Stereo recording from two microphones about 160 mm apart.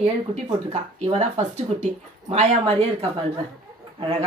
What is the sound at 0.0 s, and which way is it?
Speech, 40° right (ahead or behind).